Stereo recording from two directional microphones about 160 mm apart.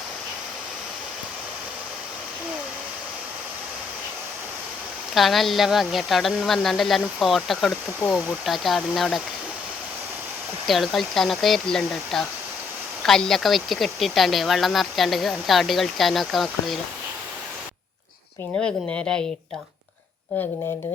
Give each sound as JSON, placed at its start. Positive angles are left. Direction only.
{"t": 5.1, "sound": "speech", "side_deg": 0}
{"t": 10.7, "sound": "speech", "side_deg": 0}
{"t": 18.6, "sound": "speech", "side_deg": 5}